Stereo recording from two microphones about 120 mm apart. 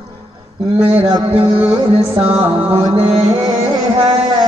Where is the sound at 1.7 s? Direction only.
55° right (ahead or behind).